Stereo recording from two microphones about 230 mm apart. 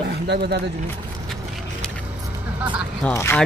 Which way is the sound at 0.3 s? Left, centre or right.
Right.